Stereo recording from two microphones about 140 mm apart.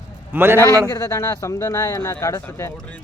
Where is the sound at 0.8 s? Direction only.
20° left (ahead or behind).